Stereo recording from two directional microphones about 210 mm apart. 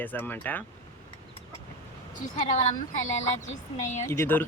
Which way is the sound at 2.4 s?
30° left (ahead or behind).